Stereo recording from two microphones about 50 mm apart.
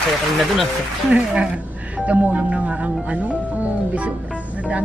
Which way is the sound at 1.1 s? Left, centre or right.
Right.